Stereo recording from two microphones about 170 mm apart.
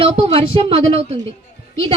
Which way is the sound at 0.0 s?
30° right (ahead or behind).